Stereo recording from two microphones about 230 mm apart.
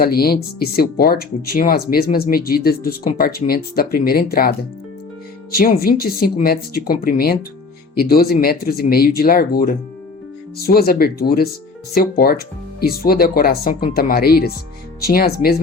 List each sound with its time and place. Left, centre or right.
0.0 s speech: left
10.7 s speech: left